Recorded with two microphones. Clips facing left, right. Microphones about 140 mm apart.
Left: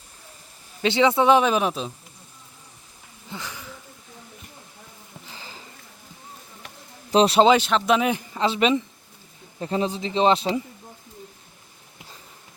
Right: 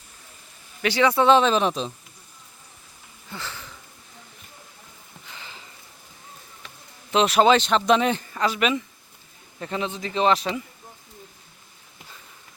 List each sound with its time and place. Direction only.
0.8 s speech: 25° left (ahead or behind); by 1.9 s 5° left (ahead or behind)
3.2 s a sound: 15° left (ahead or behind)
5.2 s sniff: 35° left (ahead or behind)
7.1 s a man's voice: 35° left (ahead or behind)
7.4 s a man's voice: 10° left (ahead or behind); by 10.6 s 30° left (ahead or behind)